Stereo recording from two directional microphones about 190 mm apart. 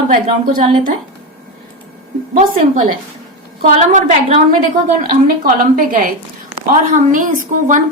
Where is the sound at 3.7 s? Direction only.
40° right (ahead or behind).